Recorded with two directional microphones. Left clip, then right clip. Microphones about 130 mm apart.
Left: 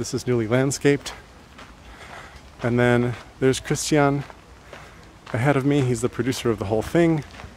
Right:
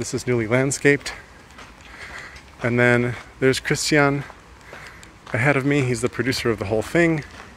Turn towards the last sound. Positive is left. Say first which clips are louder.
# right 1 dB
turn(degrees=35)  # may be behind; listen again after turning